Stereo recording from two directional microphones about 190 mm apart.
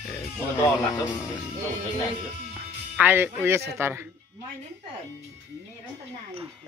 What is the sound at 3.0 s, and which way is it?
Speech, 10° right (ahead or behind).